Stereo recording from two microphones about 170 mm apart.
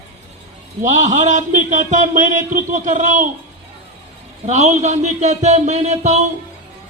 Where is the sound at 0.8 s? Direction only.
45° right (ahead or behind).